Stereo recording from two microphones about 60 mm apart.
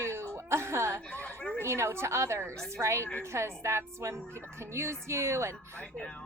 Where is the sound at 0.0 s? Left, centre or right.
Right.